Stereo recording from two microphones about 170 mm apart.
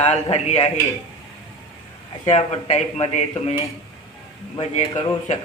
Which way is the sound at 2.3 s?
40° left (ahead or behind).